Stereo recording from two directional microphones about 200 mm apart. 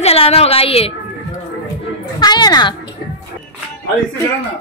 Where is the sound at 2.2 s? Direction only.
20° left (ahead or behind).